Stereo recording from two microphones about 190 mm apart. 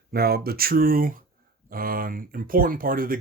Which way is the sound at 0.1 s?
55° right (ahead or behind).